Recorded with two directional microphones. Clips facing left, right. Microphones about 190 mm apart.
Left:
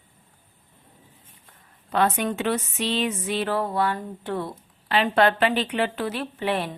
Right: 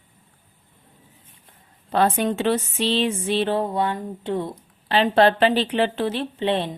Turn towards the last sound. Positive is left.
turn(degrees=-25)  # may be behind; listen again after turning